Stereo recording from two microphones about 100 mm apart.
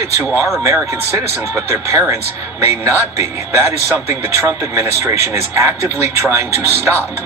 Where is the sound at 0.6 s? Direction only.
30° right (ahead or behind).